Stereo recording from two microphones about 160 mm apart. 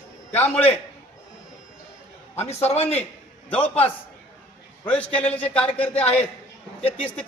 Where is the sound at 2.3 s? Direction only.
40° left (ahead or behind).